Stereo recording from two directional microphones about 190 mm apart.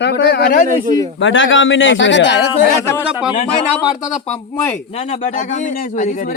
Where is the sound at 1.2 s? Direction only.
85° left.